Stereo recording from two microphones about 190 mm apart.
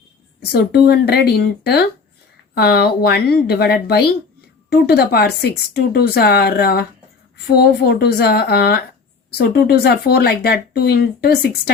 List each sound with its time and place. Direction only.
0.5 s speech: 55° left (ahead or behind)